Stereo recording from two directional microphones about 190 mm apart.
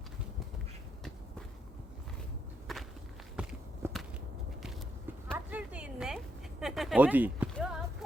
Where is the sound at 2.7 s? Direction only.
Centre (ahead or behind).